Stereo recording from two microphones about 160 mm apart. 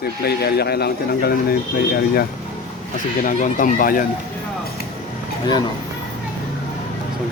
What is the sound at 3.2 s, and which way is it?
Speech, 55° left (ahead or behind).